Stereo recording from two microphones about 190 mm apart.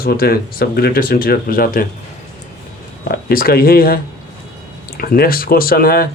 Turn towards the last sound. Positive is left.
turn(degrees=50)  # may be behind; listen again after turning